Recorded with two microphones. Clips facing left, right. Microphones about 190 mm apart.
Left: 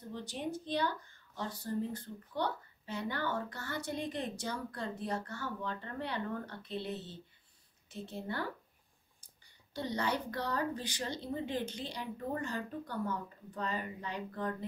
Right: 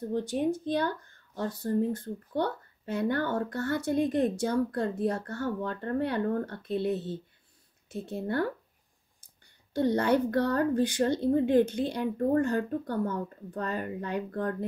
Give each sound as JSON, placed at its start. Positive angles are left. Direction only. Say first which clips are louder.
{"t": 0.1, "sound": "speech", "louder": "right 10 dB", "side_deg": -50}
{"t": 9.8, "sound": "speech", "louder": "right 11 dB", "side_deg": -55}